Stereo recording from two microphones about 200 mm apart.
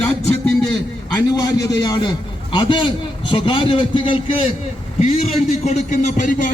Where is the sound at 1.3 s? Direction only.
20° left (ahead or behind).